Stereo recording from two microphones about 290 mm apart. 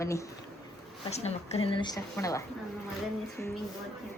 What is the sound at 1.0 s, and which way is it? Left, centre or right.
A woman's voice, left.